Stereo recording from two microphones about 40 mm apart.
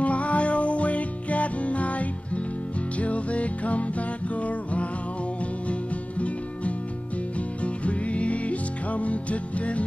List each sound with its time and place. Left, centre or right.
0.0 s music: left